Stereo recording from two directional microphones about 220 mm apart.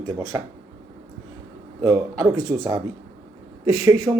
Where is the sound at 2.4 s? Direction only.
Centre (ahead or behind).